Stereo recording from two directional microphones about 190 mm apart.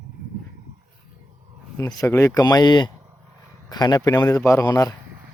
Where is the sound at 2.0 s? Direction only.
15° left (ahead or behind).